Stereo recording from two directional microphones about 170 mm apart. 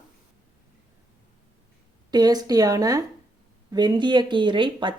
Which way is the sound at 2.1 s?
25° right (ahead or behind).